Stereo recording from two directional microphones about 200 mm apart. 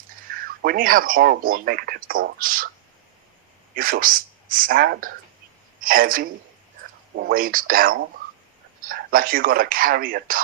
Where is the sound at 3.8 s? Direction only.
45° right (ahead or behind).